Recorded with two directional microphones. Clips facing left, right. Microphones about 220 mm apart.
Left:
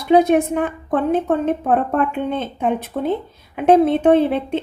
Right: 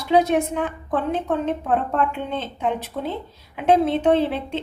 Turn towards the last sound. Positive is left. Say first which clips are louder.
# left 5 dB
turn(degrees=55)  # may be behind; listen again after turning